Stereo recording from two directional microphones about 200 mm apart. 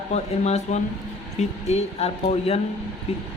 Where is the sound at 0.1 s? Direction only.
35° left (ahead or behind).